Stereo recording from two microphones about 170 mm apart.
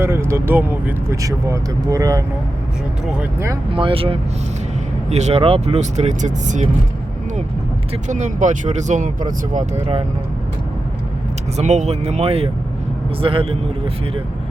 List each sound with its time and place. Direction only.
0.0 s speech: 15° right (ahead or behind)
3.7 s speech: 30° right (ahead or behind)
8.0 s speech: 45° right (ahead or behind)
11.5 s speech: 45° right (ahead or behind)